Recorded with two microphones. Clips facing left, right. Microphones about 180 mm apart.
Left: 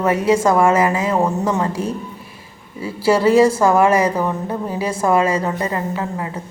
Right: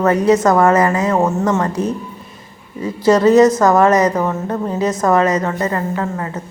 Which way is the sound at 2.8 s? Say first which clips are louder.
Right 3 dB; 10° left (ahead or behind).